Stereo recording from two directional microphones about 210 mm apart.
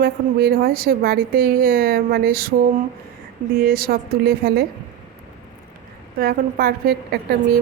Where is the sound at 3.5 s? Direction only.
45° right (ahead or behind).